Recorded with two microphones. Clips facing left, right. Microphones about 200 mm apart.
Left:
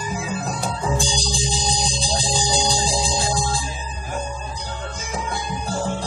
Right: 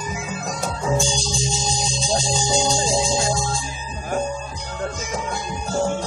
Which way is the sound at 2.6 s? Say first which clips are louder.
Right 2 dB; centre (ahead or behind).